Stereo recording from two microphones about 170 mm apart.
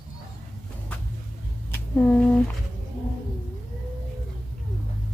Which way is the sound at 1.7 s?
10° left (ahead or behind).